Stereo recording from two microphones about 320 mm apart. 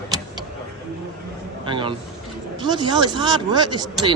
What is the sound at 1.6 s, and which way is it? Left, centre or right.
A man's voice, centre.